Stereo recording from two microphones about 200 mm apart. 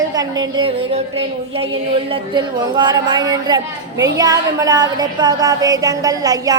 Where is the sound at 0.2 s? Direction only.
20° right (ahead or behind).